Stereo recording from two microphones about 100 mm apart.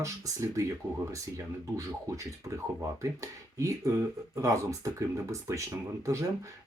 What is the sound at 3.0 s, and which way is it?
Speech, 30° right (ahead or behind).